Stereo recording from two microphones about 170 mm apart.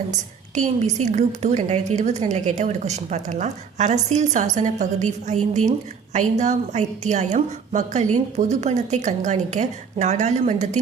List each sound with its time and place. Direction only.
0.1 s a woman's voice: 45° right (ahead or behind)